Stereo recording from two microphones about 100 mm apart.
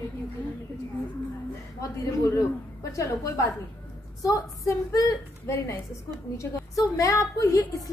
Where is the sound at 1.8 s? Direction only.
35° left (ahead or behind).